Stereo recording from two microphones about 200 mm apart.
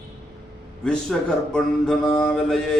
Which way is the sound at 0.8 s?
5° left (ahead or behind).